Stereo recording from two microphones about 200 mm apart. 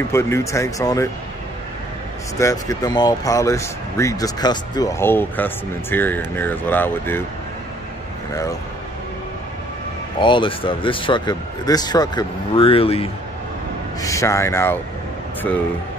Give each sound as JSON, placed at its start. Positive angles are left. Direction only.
{"t": 0.1, "sound": "speech", "side_deg": 15}
{"t": 2.3, "sound": "speech", "side_deg": 15}
{"t": 10.2, "sound": "speech", "side_deg": 25}
{"t": 14.0, "sound": "speech", "side_deg": 15}